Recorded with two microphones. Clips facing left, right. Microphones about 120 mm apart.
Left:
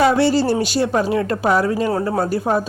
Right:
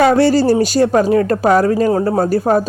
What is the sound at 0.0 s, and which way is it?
Speech, 45° right (ahead or behind).